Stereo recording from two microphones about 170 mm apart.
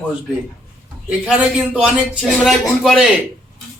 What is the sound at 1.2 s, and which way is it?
Speech, 5° right (ahead or behind).